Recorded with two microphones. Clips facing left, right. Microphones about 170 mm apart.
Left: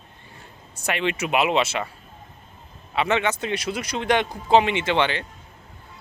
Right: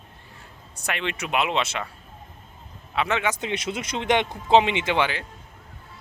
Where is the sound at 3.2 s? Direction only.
15° right (ahead or behind).